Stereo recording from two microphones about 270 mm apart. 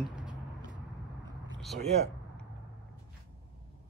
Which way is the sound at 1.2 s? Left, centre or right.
Centre.